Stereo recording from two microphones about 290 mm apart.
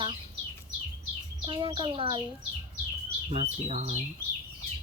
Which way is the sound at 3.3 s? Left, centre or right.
Right.